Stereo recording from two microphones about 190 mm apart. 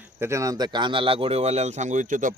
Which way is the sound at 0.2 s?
15° right (ahead or behind).